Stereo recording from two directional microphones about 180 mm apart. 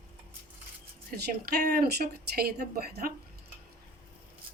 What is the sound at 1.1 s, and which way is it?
Speech, 55° right (ahead or behind).